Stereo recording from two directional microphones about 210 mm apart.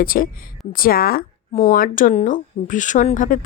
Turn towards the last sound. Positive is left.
turn(degrees=40)  # may be behind; listen again after turning